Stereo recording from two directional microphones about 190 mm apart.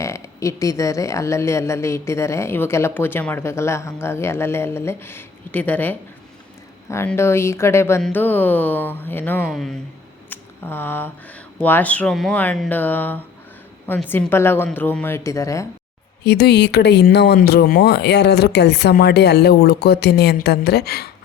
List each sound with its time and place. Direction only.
0.0 s speech: 15° left (ahead or behind)
10.2 s a sound: 10° left (ahead or behind)
11.6 s speech: 10° left (ahead or behind)
16.2 s speech: 60° left (ahead or behind)